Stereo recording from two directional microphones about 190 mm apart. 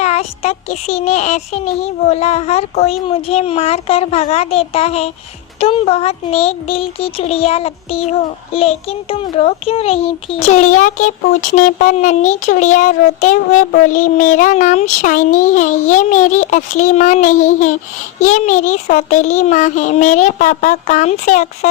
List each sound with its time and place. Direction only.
0.0 s speech: 35° left (ahead or behind)